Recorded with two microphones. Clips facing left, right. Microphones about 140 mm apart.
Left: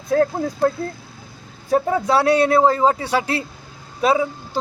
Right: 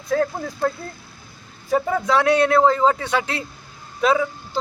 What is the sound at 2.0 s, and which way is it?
A man's voice, 35° left (ahead or behind).